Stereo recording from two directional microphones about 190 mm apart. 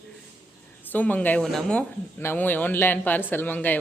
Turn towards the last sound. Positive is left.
turn(degrees=10)  # may be behind; listen again after turning